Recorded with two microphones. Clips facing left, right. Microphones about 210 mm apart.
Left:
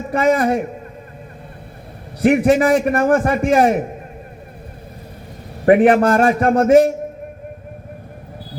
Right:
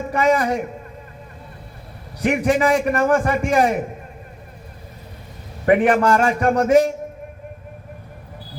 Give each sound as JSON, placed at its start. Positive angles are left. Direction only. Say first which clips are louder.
{"t": 0.1, "sound": "a man's voice", "louder": "left 3 dB", "side_deg": 45}
{"t": 2.2, "sound": "a man's voice", "louder": "left 5 dB", "side_deg": 45}
{"t": 5.6, "sound": "a man's voice", "louder": "left 4 dB", "side_deg": 35}